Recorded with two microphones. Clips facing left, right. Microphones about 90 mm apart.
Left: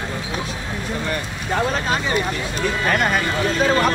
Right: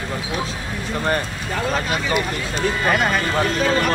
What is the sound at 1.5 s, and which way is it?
Speech, 35° left (ahead or behind).